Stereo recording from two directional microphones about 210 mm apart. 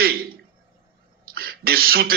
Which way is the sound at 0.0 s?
45° right (ahead or behind).